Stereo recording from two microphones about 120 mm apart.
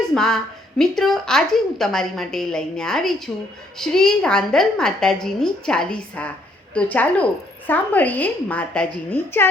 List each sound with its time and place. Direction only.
0.1 s a woman's voice: 5° left (ahead or behind)